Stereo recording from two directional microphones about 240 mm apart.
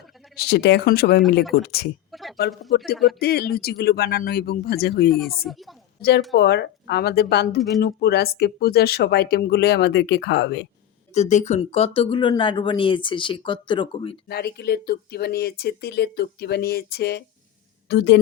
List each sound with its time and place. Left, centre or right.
0.3 s speech: left
2.1 s a sound: centre
2.7 s speech: left
5.1 s a woman's voice: centre
6.0 s speech: left
11.1 s speech: left
14.3 s speech: left